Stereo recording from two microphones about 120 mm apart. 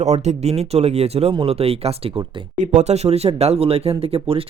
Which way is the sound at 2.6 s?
70° right (ahead or behind).